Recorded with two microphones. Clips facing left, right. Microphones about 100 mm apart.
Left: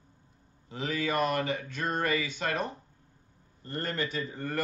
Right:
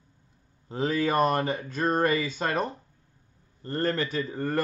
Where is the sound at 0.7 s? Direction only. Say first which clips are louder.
Right 5 dB; 35° right (ahead or behind).